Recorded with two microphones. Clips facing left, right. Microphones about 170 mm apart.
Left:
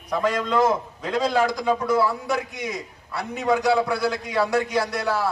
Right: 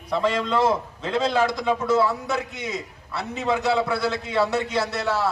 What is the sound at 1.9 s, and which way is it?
A man's voice, 25° right (ahead or behind).